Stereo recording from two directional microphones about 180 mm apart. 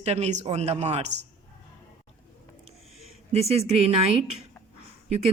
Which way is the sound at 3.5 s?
35° right (ahead or behind).